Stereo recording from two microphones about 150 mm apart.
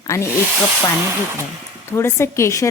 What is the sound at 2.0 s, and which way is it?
Speech, 15° left (ahead or behind).